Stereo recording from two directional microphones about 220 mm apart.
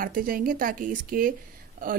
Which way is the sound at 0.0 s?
40° right (ahead or behind).